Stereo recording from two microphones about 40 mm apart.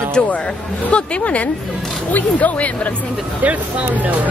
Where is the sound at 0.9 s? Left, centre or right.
Left.